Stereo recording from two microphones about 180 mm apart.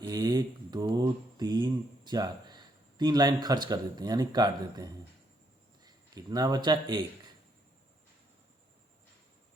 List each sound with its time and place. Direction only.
0.0 s mantra: 20° right (ahead or behind)
5.8 s speech: 20° right (ahead or behind)